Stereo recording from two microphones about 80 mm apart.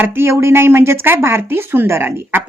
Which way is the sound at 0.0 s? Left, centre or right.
Right.